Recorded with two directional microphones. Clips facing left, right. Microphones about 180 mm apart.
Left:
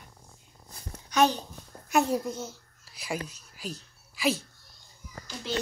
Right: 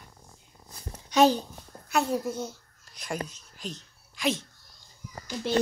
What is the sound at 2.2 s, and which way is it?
Speech, 10° right (ahead or behind).